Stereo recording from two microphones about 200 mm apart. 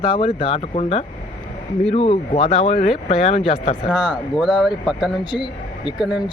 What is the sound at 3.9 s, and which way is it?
Speech, 5° right (ahead or behind).